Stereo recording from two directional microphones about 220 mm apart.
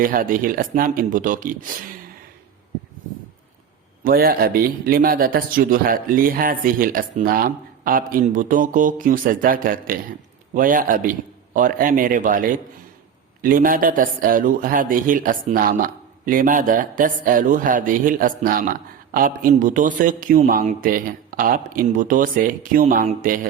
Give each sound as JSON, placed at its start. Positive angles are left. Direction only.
{"t": 0.0, "sound": "a man's voice", "side_deg": -40}
{"t": 4.0, "sound": "a man's voice", "side_deg": -40}